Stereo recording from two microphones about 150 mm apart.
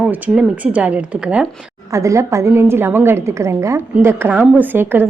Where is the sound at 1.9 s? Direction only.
20° right (ahead or behind).